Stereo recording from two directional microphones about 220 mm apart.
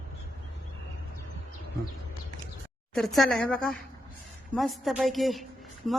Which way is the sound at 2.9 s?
Centre (ahead or behind).